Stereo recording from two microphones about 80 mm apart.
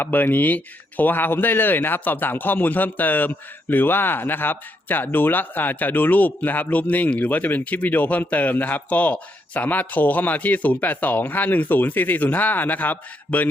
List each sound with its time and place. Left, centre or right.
0.0 s speech: left